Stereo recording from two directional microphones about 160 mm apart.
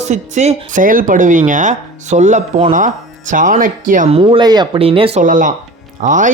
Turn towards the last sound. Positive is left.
turn(degrees=-50)  # may be behind; listen again after turning